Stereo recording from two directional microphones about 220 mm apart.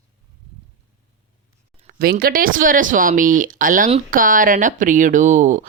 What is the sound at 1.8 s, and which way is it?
Speech, 40° right (ahead or behind).